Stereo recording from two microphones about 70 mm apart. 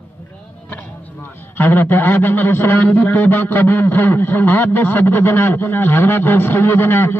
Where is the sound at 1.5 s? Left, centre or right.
Left.